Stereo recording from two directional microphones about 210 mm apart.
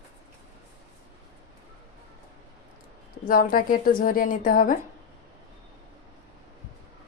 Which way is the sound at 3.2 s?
40° left (ahead or behind).